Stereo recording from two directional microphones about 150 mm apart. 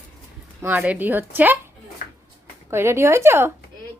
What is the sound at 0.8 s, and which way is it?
Speech, 10° right (ahead or behind).